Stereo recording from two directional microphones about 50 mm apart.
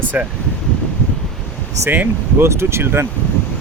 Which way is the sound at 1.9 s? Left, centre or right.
Right.